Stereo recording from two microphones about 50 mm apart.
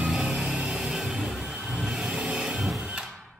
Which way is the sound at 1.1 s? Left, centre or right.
Centre.